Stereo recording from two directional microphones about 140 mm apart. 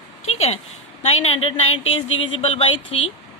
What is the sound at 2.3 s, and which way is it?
Speech, 45° left (ahead or behind).